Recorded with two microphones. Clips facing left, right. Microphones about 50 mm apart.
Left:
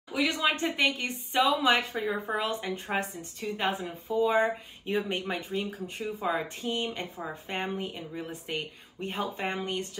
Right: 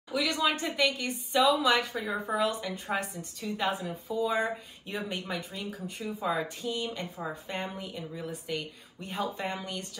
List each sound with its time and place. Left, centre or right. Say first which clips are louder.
0.1 s a woman's voice: left 1 dB; left